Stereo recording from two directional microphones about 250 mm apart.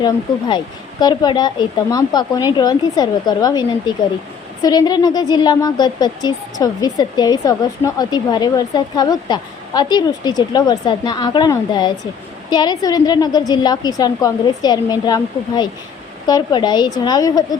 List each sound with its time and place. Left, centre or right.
0.0 s speech: centre